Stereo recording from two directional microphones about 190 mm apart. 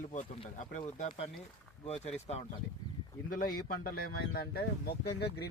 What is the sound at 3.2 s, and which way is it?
A man's voice, 50° left (ahead or behind).